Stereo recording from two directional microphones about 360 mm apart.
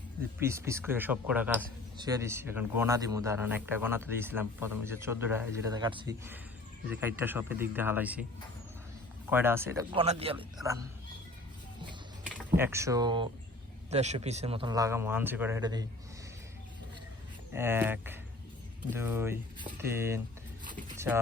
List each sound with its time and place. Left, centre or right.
0.4 s speech: centre
9.3 s speech: centre
12.5 s speech: centre
17.5 s speech: centre
20.7 s a sound: right